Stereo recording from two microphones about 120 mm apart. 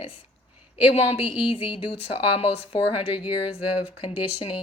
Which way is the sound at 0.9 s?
55° left (ahead or behind).